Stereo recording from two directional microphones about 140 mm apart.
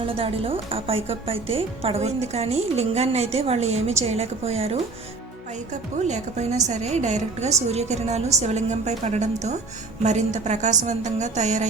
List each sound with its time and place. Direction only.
0.2 s speech: 40° right (ahead or behind)
6.1 s a woman's voice: 55° right (ahead or behind)